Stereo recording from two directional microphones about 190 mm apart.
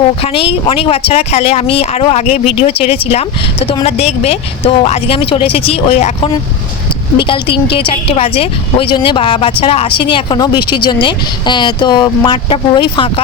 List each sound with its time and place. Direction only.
0.2 s a woman's voice: 30° left (ahead or behind)